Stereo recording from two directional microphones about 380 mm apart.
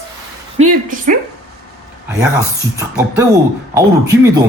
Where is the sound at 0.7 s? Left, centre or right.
Right.